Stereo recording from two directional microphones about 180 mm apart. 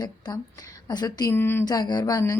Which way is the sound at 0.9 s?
20° left (ahead or behind).